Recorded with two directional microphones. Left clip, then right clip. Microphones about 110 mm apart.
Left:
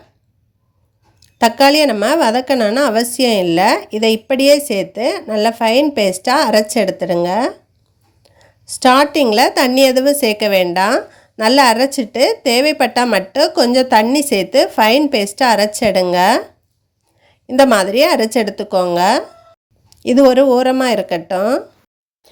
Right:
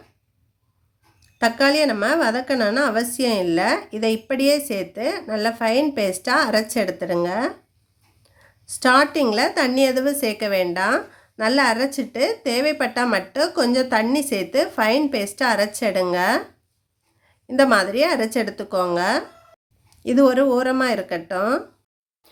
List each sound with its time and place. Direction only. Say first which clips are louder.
1.2 s a woman's voice: left 8 dB; 50° left (ahead or behind)
8.2 s a sound: left 6 dB; 40° left (ahead or behind)
9.3 s a woman's voice: left 8 dB; 45° left (ahead or behind)